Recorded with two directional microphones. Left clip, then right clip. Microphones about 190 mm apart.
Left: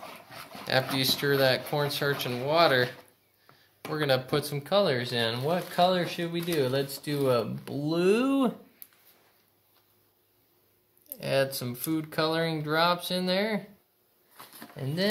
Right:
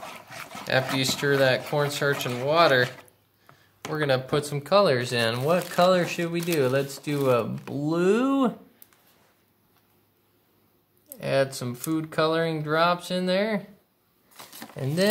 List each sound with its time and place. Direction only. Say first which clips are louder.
0.9 s speech: right 2 dB; centre (ahead or behind)
3.9 s speech: right 2 dB; 15° left (ahead or behind)
4.4 s speech: right 3 dB; centre (ahead or behind)
4.6 s speech: right 6 dB; 25° right (ahead or behind); by 8.8 s centre (ahead or behind)
11.1 s speech: right 3 dB; 5° right (ahead or behind)
14.3 s a sound: right 5 dB; 35° right (ahead or behind)